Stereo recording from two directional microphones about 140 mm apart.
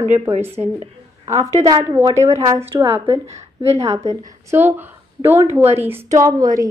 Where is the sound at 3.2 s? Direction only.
50° right (ahead or behind).